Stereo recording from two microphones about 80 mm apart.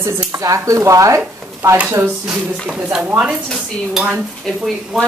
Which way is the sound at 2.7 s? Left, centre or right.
Centre.